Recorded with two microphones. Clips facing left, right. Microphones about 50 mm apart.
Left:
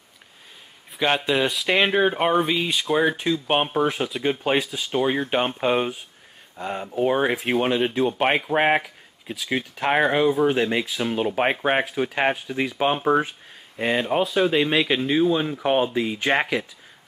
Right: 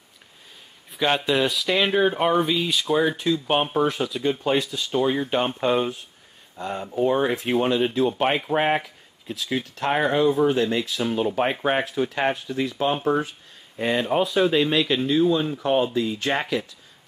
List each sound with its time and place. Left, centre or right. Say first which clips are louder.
0.9 s speech: even; centre
1.7 s speech: left 2 dB; left
3.7 s speech: even; centre
4.6 s speech: even; centre
7.0 s speech: even; left
12.8 s speech: left 3 dB; left
13.7 s speech: even; centre